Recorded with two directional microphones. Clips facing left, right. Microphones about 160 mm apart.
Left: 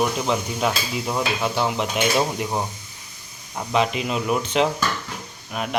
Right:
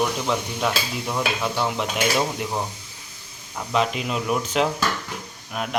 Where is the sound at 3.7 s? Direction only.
Centre (ahead or behind).